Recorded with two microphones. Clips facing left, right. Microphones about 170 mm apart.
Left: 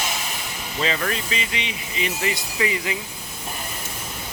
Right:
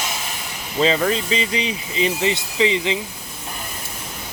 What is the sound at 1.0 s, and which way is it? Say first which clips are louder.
Speech: right 6 dB; 25° right (ahead or behind).